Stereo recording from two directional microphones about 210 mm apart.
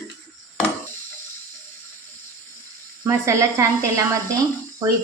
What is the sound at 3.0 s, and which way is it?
A woman's voice, 15° right (ahead or behind).